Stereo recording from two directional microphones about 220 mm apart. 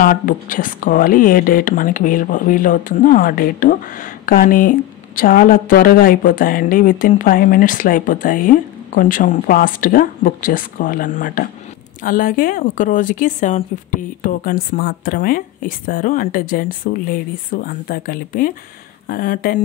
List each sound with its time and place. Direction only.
0.0 s speech: 40° left (ahead or behind)